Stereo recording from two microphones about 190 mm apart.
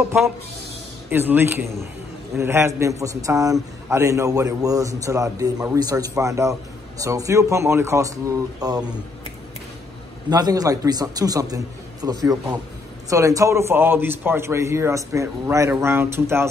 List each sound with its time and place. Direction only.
1.1 s a man's voice: 10° right (ahead or behind)
10.3 s a man's voice: 20° right (ahead or behind)